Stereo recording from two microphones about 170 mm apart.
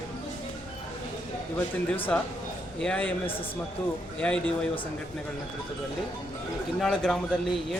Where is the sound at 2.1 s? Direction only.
5° left (ahead or behind).